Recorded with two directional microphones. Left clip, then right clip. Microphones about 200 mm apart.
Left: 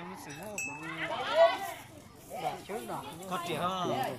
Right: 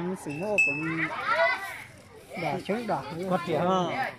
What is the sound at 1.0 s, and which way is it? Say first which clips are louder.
Speech: left 1 dB; 25° left (ahead or behind).